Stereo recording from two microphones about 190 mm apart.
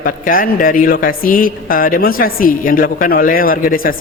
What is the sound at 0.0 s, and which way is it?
Speech, 45° left (ahead or behind).